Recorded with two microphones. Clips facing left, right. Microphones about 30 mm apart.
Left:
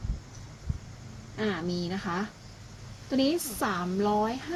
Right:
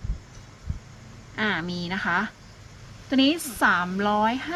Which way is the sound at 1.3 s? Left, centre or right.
Right.